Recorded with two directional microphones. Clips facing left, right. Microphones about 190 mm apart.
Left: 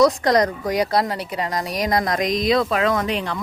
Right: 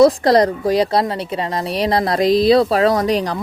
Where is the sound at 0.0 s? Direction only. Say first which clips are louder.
Right 5 dB; 30° right (ahead or behind).